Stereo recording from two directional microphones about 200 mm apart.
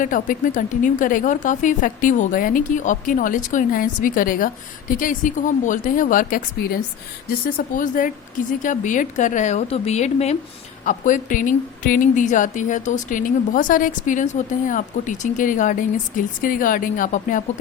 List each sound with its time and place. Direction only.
0.0 s a woman's voice: 40° left (ahead or behind)